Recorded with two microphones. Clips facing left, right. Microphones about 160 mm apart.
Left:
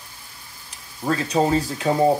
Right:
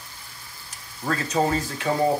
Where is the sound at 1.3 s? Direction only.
25° left (ahead or behind).